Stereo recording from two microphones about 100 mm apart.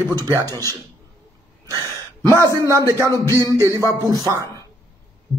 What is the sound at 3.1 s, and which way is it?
Music, 30° left (ahead or behind).